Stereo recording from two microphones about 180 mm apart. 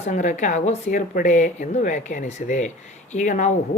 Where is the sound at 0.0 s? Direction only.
40° left (ahead or behind).